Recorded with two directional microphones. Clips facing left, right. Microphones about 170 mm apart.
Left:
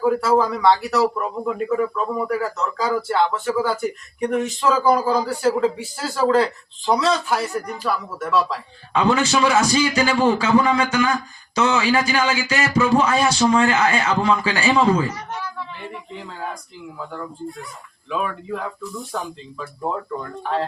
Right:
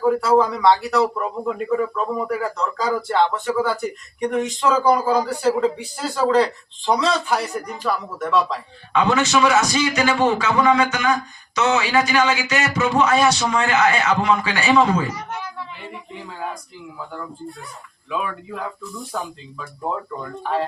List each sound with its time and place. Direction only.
0.0 s speech: 5° left (ahead or behind)
2.3 s speech: 5° left (ahead or behind)
8.9 s speech: 30° left (ahead or behind)
18.1 s speech: centre (ahead or behind)